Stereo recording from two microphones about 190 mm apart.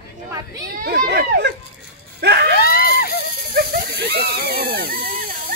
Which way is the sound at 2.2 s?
65° right (ahead or behind).